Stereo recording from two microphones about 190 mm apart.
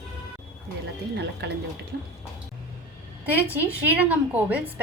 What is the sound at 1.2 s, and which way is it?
Speech, 65° right (ahead or behind).